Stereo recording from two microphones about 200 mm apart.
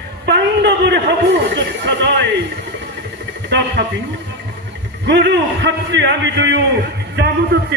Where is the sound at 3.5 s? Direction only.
60° right (ahead or behind).